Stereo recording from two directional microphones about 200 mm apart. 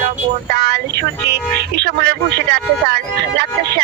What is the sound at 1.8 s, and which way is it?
Speech, 60° right (ahead or behind).